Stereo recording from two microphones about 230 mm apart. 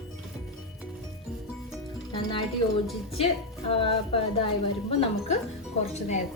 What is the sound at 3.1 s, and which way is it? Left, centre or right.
A woman's voice, left.